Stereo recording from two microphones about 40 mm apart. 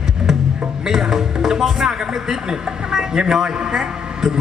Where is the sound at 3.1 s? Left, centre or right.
Centre.